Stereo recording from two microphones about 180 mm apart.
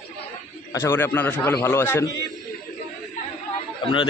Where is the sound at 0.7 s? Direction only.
15° left (ahead or behind).